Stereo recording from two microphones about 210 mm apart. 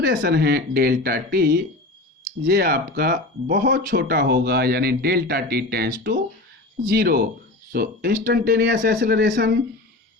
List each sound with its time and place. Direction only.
0.0 s speech: 55° right (ahead or behind)